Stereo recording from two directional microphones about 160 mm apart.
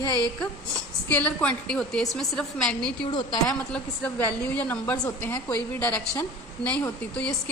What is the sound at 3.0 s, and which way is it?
Speech, 30° left (ahead or behind).